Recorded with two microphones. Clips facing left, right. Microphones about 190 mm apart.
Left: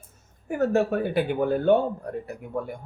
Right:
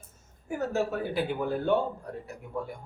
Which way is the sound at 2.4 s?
60° left (ahead or behind).